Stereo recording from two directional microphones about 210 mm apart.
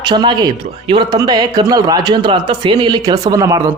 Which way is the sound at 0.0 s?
20° right (ahead or behind).